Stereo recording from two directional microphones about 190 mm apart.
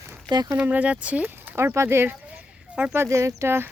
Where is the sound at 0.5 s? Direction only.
10° right (ahead or behind).